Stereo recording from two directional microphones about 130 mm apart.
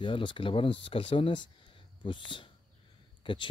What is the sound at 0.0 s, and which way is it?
Speech, 40° left (ahead or behind).